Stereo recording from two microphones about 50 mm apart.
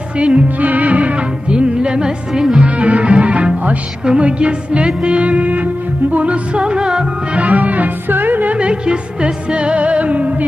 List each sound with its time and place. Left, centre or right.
0.2 s music: right
2.7 s music: right
7.4 s music: right
8.5 s music: right